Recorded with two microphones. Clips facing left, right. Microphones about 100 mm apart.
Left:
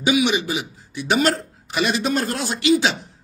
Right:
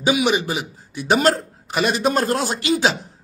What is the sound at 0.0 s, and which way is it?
A man's voice, 40° right (ahead or behind).